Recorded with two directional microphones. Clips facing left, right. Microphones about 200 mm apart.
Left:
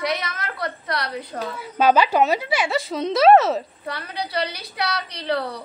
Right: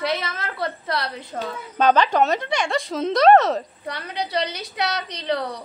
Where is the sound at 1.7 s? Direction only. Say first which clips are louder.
Left 1 dB; 10° left (ahead or behind).